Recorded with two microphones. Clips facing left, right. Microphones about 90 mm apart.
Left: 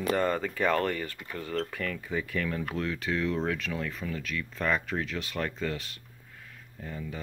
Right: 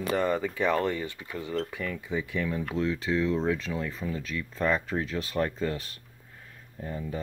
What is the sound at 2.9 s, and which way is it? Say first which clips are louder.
Speech: right 3 dB; 25° right (ahead or behind).